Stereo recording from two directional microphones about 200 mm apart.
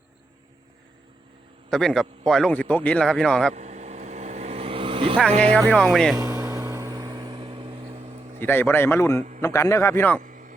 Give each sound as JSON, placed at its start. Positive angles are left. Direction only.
{"t": 1.7, "sound": "speech", "side_deg": 0}
{"t": 3.5, "sound": "vehicle", "side_deg": -35}
{"t": 5.3, "sound": "speech", "side_deg": -35}
{"t": 5.7, "sound": "speech", "side_deg": 0}
{"t": 6.1, "sound": "a sound", "side_deg": -15}
{"t": 8.4, "sound": "speech", "side_deg": 10}
{"t": 10.2, "sound": "a sound", "side_deg": -40}